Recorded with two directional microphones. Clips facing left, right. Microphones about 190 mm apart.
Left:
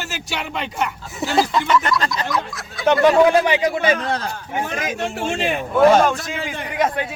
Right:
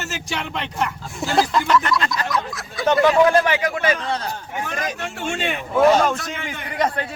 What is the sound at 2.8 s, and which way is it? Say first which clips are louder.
A man's voice: left 2 dB; 15° left (ahead or behind).